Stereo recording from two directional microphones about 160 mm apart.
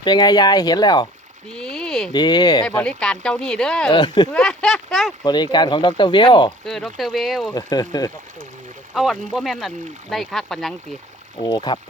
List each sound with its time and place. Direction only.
0.0 s speech: 25° left (ahead or behind)
1.5 s a sound: 5° left (ahead or behind)
2.1 s speech: 25° left (ahead or behind)
2.6 s speech: 5° left (ahead or behind)
3.9 s speech: 25° left (ahead or behind)
4.3 s speech: 5° left (ahead or behind)
5.2 s speech: 25° left (ahead or behind)
6.7 s speech: centre (ahead or behind)
7.5 s speech: 25° left (ahead or behind)
9.0 s speech: centre (ahead or behind)
11.4 s speech: 30° left (ahead or behind)